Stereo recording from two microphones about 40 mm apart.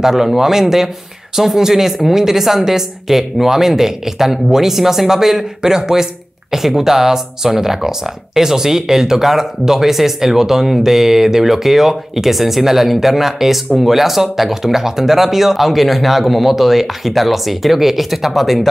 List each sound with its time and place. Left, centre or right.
0.0 s speech: centre